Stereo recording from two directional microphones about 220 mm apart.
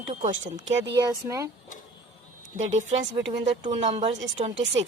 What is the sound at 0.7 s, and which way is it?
Speech, 50° right (ahead or behind).